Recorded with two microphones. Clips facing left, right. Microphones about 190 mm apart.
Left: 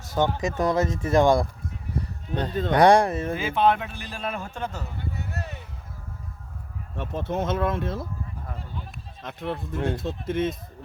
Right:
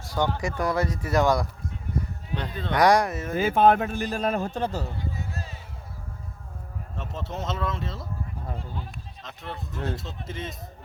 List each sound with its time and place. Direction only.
0.0 s speech: 20° left (ahead or behind)
2.4 s speech: 45° left (ahead or behind)
2.7 s speech: 30° left (ahead or behind)
3.3 s a man's voice: 45° right (ahead or behind)
5.1 s a sound: 65° left (ahead or behind)
6.9 s speech: 55° left (ahead or behind)
9.2 s speech: 55° left (ahead or behind)